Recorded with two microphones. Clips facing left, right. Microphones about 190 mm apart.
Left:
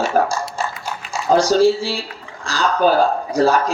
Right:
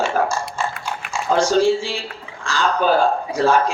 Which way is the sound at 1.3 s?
40° left (ahead or behind).